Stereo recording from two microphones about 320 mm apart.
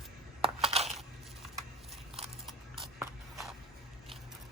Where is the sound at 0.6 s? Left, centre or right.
Centre.